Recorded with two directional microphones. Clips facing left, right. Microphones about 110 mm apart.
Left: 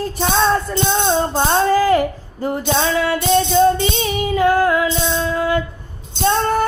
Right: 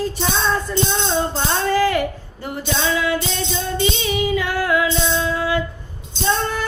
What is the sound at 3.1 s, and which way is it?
Music, 45° left (ahead or behind).